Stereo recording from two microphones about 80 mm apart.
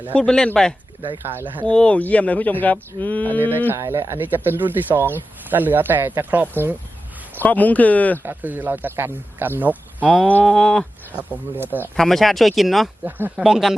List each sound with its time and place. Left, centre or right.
0.2 s speech: centre
1.2 s speech: right
1.6 s speech: centre
3.8 s speech: right
4.4 s speech: right
7.4 s speech: centre
8.2 s speech: right
10.4 s speech: centre
11.5 s speech: right
11.9 s speech: centre
13.1 s speech: right
13.4 s speech: centre